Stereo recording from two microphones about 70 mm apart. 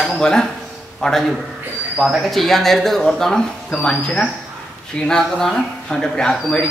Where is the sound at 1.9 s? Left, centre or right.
Centre.